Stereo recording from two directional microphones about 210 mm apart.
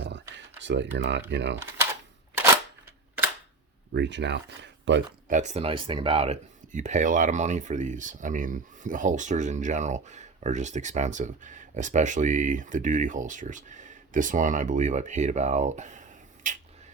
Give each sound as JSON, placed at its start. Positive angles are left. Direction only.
{"t": 0.0, "sound": "typing", "side_deg": -60}
{"t": 1.3, "sound": "speech", "side_deg": -55}
{"t": 3.9, "sound": "speech", "side_deg": -55}
{"t": 5.3, "sound": "speech", "side_deg": -35}